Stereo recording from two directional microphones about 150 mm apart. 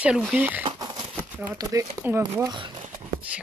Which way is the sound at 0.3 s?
10° right (ahead or behind).